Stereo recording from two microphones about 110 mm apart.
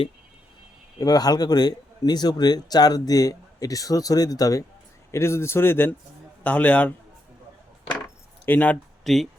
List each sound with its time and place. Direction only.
0.9 s a man's voice: 35° left (ahead or behind)
5.1 s a man's voice: 25° left (ahead or behind)
8.4 s a man's voice: 15° left (ahead or behind)
9.0 s speech: centre (ahead or behind)